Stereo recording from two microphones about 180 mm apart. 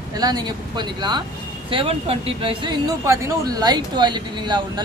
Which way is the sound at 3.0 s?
20° right (ahead or behind).